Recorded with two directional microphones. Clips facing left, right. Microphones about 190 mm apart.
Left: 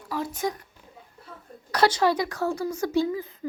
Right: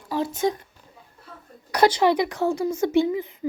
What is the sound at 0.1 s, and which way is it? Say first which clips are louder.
Speech: right 5 dB; 25° right (ahead or behind).